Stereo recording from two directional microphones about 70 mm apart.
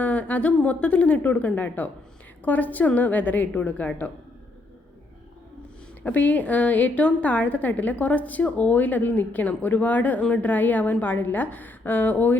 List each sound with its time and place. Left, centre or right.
0.0 s a woman's voice: centre
6.0 s a woman's voice: left